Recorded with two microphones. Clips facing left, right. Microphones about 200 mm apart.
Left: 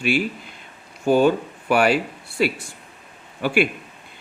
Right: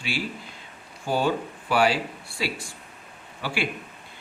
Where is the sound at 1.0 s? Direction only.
55° left (ahead or behind).